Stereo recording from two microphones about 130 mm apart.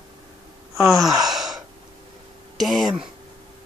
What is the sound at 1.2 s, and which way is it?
Sigh, centre (ahead or behind).